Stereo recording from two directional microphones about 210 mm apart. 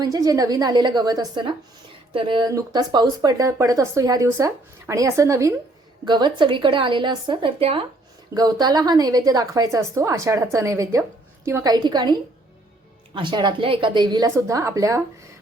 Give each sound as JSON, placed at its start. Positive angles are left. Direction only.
{"t": 0.0, "sound": "a woman's voice", "side_deg": -15}